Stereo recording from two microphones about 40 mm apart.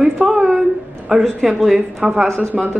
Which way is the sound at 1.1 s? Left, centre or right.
Centre.